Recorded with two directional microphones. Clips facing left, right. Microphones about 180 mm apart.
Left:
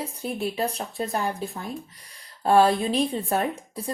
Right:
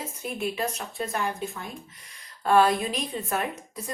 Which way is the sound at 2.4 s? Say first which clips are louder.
Left 2 dB; 30° left (ahead or behind).